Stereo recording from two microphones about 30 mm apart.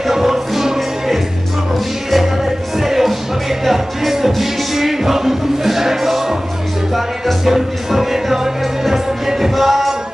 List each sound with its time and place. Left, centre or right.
0.0 s music: centre
2.8 s music: centre
7.4 s music: centre